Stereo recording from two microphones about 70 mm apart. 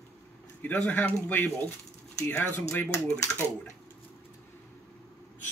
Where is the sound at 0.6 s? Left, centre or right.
Left.